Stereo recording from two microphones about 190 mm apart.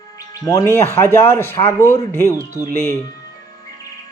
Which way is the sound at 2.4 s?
15° right (ahead or behind).